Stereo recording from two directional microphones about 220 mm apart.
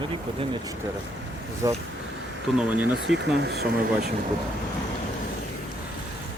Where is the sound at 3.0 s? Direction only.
55° right (ahead or behind).